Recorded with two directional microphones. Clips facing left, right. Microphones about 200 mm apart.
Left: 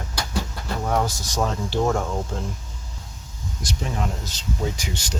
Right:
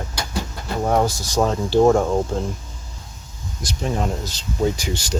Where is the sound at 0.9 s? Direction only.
35° right (ahead or behind).